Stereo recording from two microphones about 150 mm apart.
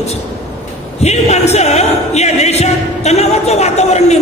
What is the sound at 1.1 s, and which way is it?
A woman's voice, 45° left (ahead or behind).